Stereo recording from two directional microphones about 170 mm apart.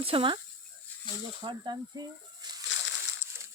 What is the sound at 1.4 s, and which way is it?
Speech, 25° right (ahead or behind).